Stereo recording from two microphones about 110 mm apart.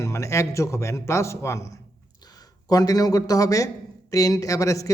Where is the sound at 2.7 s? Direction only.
35° left (ahead or behind).